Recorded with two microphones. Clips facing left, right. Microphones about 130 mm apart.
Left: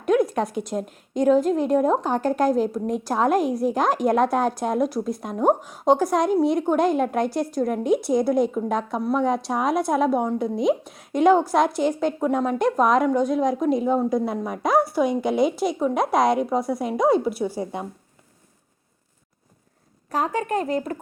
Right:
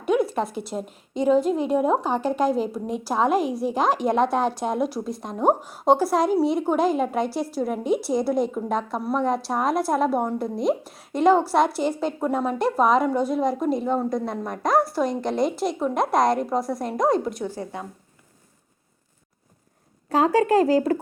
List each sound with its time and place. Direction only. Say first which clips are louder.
0.0 s a woman's voice: left 2 dB; 5° right (ahead or behind); by 17.8 s 15° left (ahead or behind)
20.1 s speech: right 5 dB; 30° right (ahead or behind)
20.3 s speech: right 6 dB; 90° right